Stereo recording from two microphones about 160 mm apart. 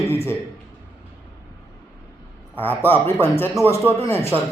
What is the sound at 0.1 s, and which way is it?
Speech, 15° left (ahead or behind).